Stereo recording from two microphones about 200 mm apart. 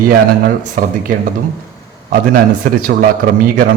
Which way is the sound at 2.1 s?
45° right (ahead or behind).